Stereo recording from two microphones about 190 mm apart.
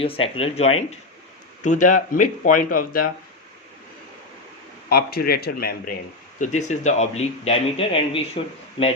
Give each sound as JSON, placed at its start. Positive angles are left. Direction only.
{"t": 0.0, "sound": "speech", "side_deg": 30}
{"t": 4.9, "sound": "speech", "side_deg": 55}
{"t": 6.4, "sound": "speech", "side_deg": 40}